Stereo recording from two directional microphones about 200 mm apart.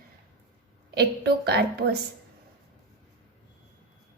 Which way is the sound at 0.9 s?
55° right (ahead or behind).